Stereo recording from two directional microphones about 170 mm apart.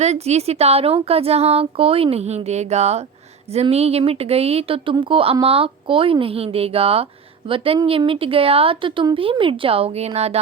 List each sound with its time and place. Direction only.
0.0 s speech: 40° right (ahead or behind)